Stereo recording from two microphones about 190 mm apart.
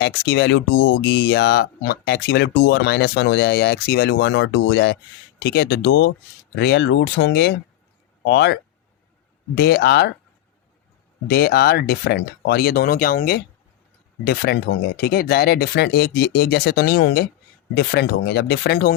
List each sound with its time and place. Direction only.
0.0 s speech: 65° left (ahead or behind)
9.6 s speech: 60° left (ahead or behind)
11.3 s speech: 55° left (ahead or behind)